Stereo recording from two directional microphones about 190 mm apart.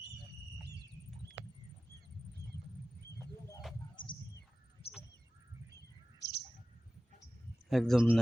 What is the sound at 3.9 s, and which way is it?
Bird, 25° left (ahead or behind).